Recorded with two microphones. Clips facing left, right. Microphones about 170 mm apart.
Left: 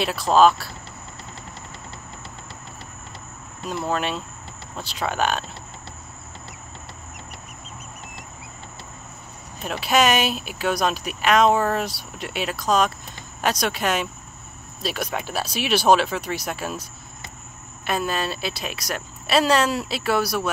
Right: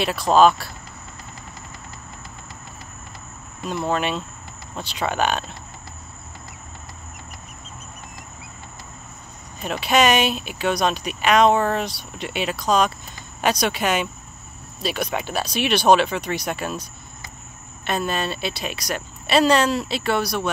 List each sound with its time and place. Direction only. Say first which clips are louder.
0.0 s speech: right 1 dB; centre (ahead or behind)
3.8 s speech: right 2 dB; centre (ahead or behind)
9.7 s speech: right 1 dB; centre (ahead or behind)